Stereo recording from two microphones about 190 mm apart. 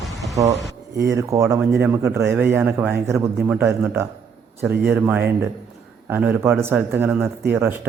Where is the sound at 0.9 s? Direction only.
15° right (ahead or behind).